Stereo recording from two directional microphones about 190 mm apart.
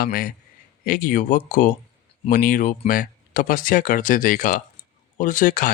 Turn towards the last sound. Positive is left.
turn(degrees=45)  # may be behind; listen again after turning